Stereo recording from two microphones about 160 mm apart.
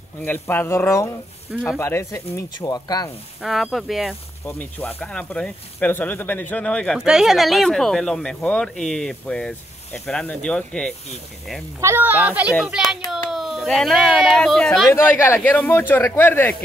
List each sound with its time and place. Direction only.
0.2 s speech: 10° left (ahead or behind)
1.5 s speech: centre (ahead or behind)
1.8 s speech: 15° left (ahead or behind)
3.4 s speech: centre (ahead or behind)
4.5 s speech: 10° left (ahead or behind)
11.8 s speech: 15° right (ahead or behind); by 14.9 s 5° left (ahead or behind)
14.9 s speech: 15° left (ahead or behind)